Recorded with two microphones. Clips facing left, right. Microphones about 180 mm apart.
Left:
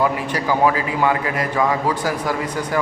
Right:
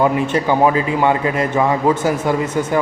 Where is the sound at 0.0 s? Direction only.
25° right (ahead or behind).